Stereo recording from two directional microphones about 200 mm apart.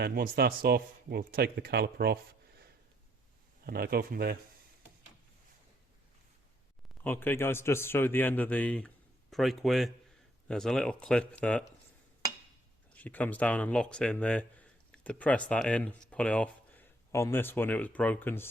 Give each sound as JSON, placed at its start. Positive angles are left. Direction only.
{"t": 0.0, "sound": "a man's voice", "side_deg": -50}
{"t": 3.6, "sound": "a man's voice", "side_deg": -50}
{"t": 7.0, "sound": "a man's voice", "side_deg": 10}
{"t": 12.9, "sound": "speech", "side_deg": 10}